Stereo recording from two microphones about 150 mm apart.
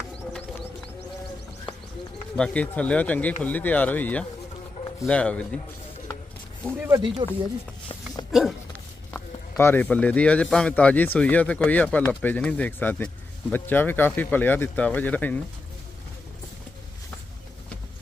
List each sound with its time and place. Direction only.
2.3 s speech: 5° left (ahead or behind)
7.2 s speech: 35° right (ahead or behind)
8.3 s a sound: centre (ahead or behind)
9.1 s speech: 15° left (ahead or behind)